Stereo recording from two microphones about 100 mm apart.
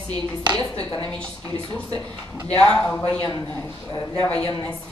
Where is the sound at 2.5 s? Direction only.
10° left (ahead or behind).